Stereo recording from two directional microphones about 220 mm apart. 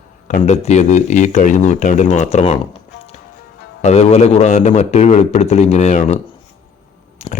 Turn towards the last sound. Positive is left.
turn(degrees=30)  # may be behind; listen again after turning